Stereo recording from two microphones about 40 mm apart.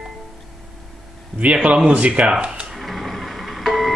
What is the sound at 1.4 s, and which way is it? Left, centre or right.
Speech, right.